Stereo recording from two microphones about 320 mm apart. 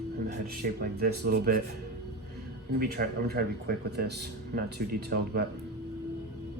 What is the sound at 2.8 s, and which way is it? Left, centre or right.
Speech, right.